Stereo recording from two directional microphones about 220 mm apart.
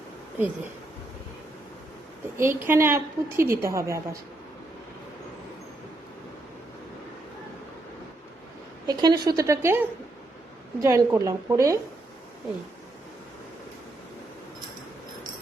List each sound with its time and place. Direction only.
0.3 s a woman's voice: 10° right (ahead or behind)
2.4 s a woman's voice: 10° right (ahead or behind)
8.9 s a woman's voice: 20° right (ahead or behind)